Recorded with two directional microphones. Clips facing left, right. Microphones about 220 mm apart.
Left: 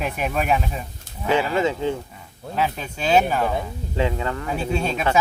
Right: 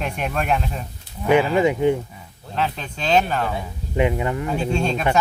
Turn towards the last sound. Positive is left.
turn(degrees=5)  # may be behind; listen again after turning